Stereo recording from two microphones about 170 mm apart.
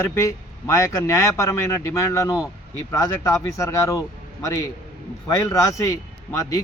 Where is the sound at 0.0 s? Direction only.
15° left (ahead or behind).